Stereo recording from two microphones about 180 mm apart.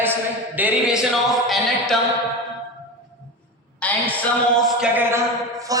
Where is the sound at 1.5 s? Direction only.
Centre (ahead or behind).